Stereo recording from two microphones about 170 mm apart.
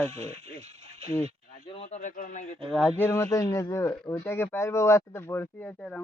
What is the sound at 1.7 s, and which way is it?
Speech, 40° left (ahead or behind).